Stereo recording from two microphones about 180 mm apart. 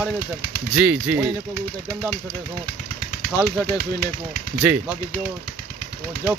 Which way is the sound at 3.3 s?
10° right (ahead or behind).